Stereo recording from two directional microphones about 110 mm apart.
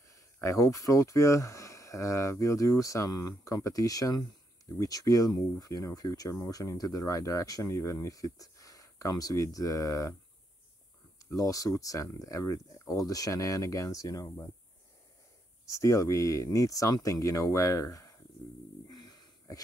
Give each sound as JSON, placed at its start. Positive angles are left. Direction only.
{"t": 0.1, "sound": "speech", "side_deg": 30}
{"t": 11.3, "sound": "speech", "side_deg": 30}
{"t": 15.6, "sound": "speech", "side_deg": 30}
{"t": 18.9, "sound": "a sound", "side_deg": 35}